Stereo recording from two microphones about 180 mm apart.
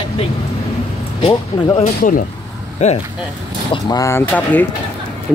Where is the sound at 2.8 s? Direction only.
40° left (ahead or behind).